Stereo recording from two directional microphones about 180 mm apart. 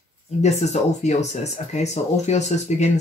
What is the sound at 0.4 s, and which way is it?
Speech, 40° left (ahead or behind).